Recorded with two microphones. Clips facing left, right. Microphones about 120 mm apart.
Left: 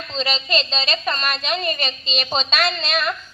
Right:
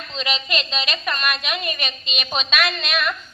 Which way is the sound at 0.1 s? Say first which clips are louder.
Left 3 dB; 35° left (ahead or behind).